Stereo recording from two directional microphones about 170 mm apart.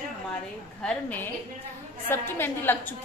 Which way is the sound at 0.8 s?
10° left (ahead or behind).